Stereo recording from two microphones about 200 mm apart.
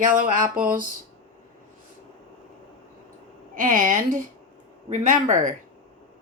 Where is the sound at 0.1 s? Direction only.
40° right (ahead or behind).